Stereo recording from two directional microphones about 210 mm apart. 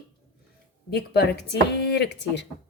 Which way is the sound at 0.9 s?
50° left (ahead or behind).